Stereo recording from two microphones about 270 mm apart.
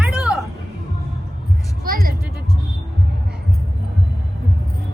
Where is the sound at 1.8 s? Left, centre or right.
Right.